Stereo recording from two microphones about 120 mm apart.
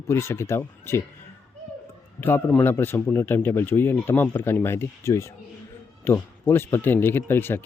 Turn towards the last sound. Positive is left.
turn(degrees=20)  # may be behind; listen again after turning